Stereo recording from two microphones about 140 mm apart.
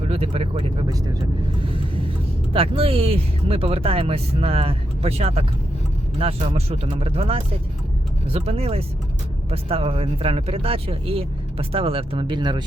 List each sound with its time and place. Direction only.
0.1 s speech: 45° right (ahead or behind)
2.5 s speech: 40° right (ahead or behind)